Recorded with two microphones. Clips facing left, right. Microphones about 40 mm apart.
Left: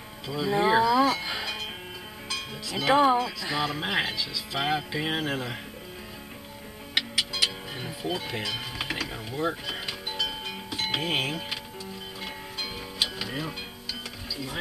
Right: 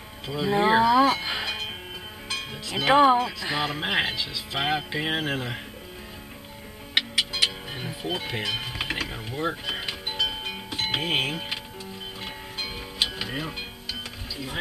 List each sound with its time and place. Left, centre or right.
0.3 s livestock: centre
2.2 s speech: right
7.0 s music: right
13.0 s music: right